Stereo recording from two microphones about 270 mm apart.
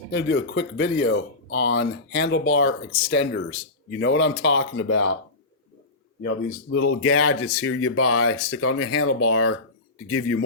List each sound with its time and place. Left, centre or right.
0.1 s speech: left
6.3 s speech: left